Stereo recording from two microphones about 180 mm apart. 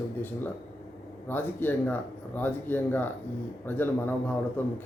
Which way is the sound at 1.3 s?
10° left (ahead or behind).